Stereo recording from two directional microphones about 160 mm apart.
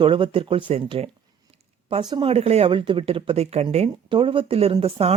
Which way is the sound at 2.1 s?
35° right (ahead or behind).